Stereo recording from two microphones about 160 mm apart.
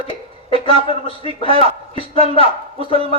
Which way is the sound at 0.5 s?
35° right (ahead or behind).